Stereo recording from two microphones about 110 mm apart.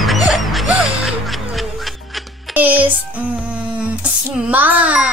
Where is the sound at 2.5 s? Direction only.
15° right (ahead or behind).